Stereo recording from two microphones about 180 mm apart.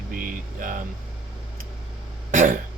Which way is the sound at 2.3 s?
50° right (ahead or behind).